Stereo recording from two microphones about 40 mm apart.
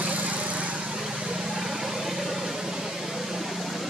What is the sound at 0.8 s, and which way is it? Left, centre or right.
Vehicle, centre.